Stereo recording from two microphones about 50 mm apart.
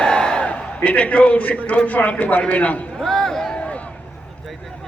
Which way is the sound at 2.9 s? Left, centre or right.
Centre.